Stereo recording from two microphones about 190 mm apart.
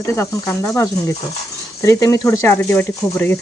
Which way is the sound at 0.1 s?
15° left (ahead or behind).